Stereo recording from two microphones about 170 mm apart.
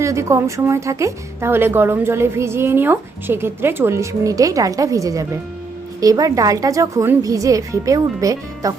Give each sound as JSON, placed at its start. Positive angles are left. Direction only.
{"t": 0.0, "sound": "speech", "side_deg": -15}